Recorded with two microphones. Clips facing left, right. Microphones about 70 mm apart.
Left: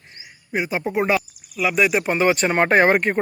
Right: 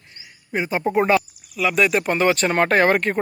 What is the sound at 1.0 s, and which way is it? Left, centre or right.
Speech, centre.